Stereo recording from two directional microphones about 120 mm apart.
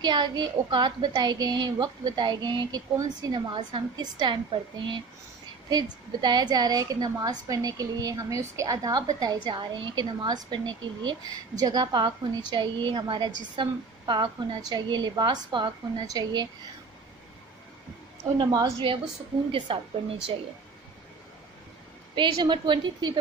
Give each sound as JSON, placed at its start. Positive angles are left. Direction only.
{"t": 0.0, "sound": "a woman's voice", "side_deg": -40}
{"t": 18.4, "sound": "a woman's voice", "side_deg": -40}
{"t": 22.1, "sound": "a woman's voice", "side_deg": -40}